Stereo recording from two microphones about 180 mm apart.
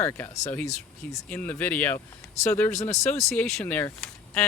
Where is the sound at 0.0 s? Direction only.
10° left (ahead or behind).